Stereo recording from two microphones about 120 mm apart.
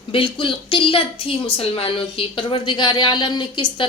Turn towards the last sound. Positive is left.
turn(degrees=40)  # may be behind; listen again after turning